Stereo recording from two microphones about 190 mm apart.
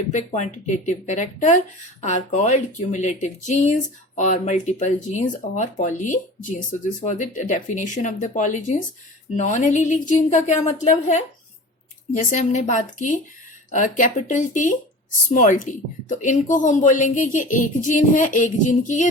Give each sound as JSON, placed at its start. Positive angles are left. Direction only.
{"t": 0.1, "sound": "speech", "side_deg": 40}